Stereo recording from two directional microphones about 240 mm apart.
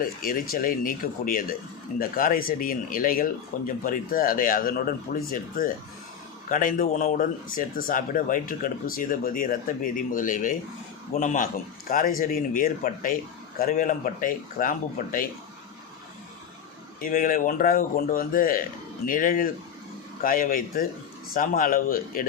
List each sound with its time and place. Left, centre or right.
0.0 s speech: left
17.0 s speech: left